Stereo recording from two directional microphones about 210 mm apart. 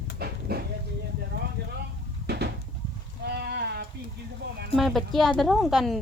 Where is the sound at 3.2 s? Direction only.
50° right (ahead or behind).